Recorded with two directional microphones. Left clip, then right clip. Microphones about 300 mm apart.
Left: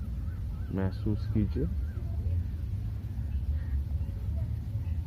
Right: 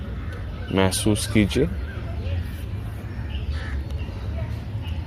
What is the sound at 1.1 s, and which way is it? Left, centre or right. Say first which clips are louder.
Speech: right 13 dB; centre.